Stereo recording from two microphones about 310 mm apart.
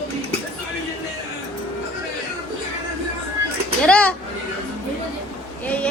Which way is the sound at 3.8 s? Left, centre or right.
Centre.